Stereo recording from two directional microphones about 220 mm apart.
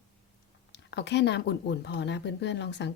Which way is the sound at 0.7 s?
50° left (ahead or behind).